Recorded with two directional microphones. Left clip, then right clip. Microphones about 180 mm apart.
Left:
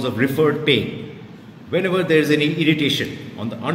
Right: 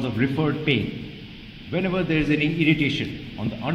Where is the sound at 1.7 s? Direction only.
35° right (ahead or behind).